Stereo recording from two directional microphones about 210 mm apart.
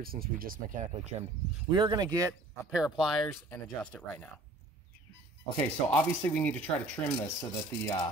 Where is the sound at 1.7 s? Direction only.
20° right (ahead or behind).